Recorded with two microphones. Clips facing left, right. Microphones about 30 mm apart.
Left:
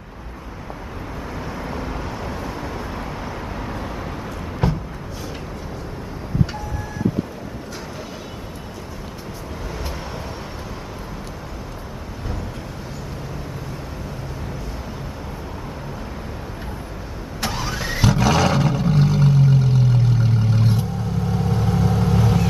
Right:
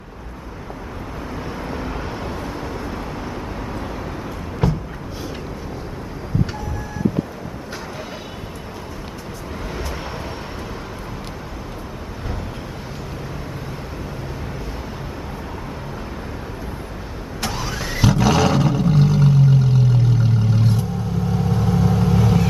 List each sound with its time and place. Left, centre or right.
1.6 s vehicle: centre
4.6 s a sound: centre
17.4 s vehicle: centre